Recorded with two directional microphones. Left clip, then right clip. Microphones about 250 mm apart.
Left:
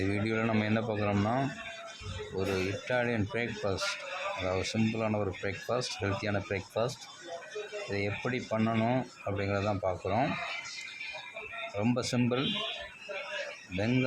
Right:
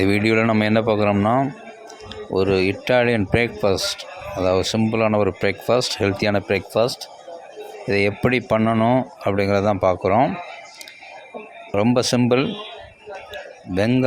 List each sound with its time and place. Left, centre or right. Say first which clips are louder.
0.0 s speech: right 14 dB; right
11.8 s speech: right 14 dB; right
13.7 s speech: right 12 dB; right